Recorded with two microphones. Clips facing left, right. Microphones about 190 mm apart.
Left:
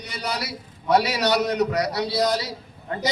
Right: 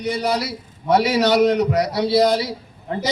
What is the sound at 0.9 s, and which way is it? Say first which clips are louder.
Speech: right 4 dB; 20° right (ahead or behind).